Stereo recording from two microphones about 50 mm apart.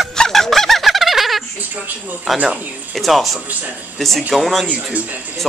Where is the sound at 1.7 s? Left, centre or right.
Right.